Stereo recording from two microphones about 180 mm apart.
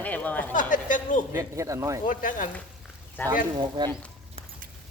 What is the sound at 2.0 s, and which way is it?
Speech, 45° left (ahead or behind).